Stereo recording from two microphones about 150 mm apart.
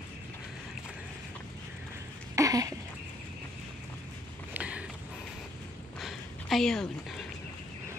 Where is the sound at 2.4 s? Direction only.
25° right (ahead or behind).